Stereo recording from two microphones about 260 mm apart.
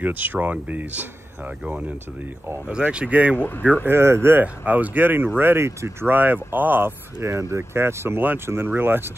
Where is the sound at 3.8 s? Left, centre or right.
Centre.